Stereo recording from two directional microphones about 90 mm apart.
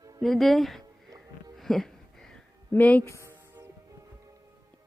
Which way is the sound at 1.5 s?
5° left (ahead or behind).